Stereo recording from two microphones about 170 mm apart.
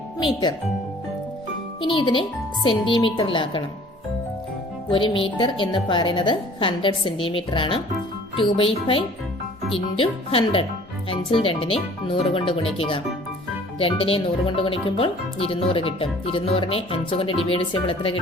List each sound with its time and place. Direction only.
0.2 s a woman's voice: 25° left (ahead or behind)
1.8 s a woman's voice: 30° left (ahead or behind)
4.9 s a woman's voice: 30° left (ahead or behind)